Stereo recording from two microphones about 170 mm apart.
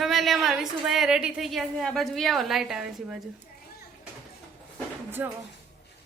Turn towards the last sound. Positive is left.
turn(degrees=-10)  # may be behind; listen again after turning